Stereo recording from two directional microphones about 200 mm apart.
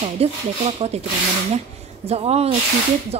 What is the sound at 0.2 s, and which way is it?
Speech, 30° right (ahead or behind).